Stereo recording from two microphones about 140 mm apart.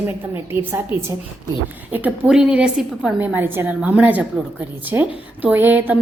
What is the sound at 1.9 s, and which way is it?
A woman's voice, 10° right (ahead or behind).